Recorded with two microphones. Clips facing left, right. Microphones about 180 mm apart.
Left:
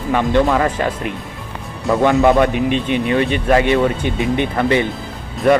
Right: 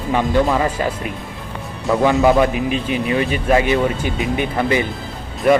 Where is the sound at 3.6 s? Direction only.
5° right (ahead or behind).